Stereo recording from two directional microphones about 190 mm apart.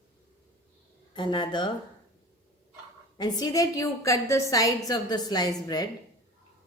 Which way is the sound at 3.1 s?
20° left (ahead or behind).